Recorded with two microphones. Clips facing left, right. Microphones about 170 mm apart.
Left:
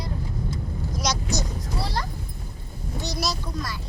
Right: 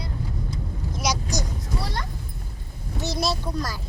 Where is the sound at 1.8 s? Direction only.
35° left (ahead or behind).